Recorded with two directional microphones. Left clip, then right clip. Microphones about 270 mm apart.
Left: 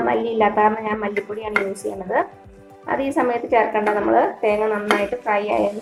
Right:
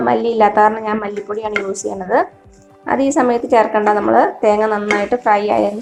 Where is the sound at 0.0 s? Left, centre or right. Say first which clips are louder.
Right 5 dB; right.